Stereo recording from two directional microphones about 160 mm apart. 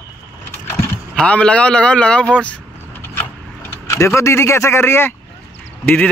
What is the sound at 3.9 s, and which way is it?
Speech, 15° left (ahead or behind).